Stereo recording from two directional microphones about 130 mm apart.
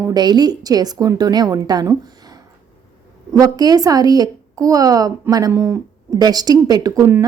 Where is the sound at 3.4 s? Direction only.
30° right (ahead or behind).